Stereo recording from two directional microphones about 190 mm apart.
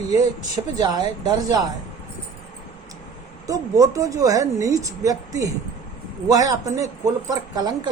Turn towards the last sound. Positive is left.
turn(degrees=-20)  # may be behind; listen again after turning